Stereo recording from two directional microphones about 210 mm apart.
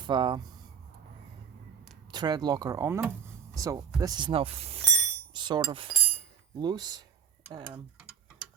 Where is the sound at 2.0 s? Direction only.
20° right (ahead or behind).